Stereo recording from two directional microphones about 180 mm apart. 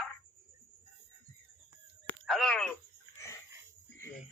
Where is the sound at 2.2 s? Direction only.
Centre (ahead or behind).